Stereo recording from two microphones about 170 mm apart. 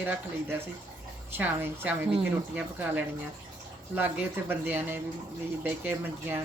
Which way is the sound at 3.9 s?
10° right (ahead or behind).